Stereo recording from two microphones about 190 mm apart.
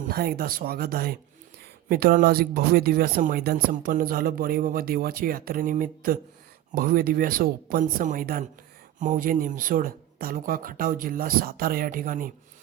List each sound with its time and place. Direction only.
0.1 s speech: 50° right (ahead or behind)